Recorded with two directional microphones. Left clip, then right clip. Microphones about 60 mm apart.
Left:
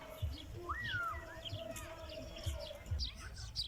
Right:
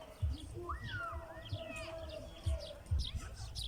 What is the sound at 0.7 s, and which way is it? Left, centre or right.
Whistling, centre.